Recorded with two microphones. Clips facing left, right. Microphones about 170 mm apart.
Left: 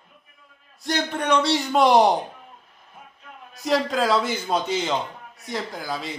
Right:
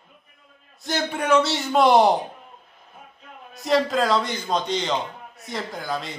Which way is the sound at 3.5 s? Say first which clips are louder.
Right 2 dB; centre (ahead or behind).